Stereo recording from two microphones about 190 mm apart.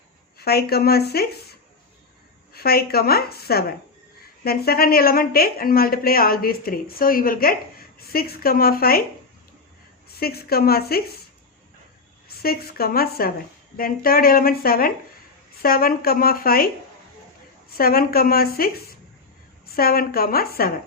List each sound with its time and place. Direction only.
0.3 s a woman's voice: 55° left (ahead or behind)
10.1 s a woman's voice: 55° left (ahead or behind)
12.4 s a woman's voice: 55° left (ahead or behind)
17.7 s a woman's voice: 50° left (ahead or behind)